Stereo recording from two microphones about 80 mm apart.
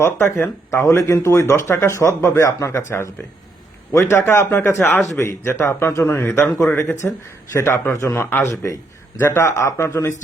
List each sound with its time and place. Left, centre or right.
0.0 s speech: left
8.2 s speech: left